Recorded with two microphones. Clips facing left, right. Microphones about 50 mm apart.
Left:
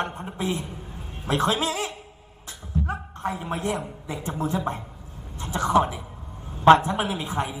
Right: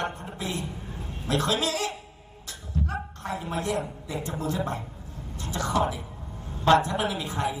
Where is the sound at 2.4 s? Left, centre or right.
Left.